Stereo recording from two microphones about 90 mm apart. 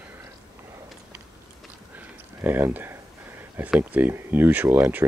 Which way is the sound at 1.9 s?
25° right (ahead or behind).